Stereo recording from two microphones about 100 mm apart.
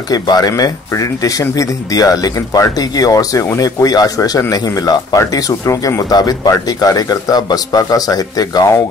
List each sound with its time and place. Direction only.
0.1 s speech: 40° left (ahead or behind)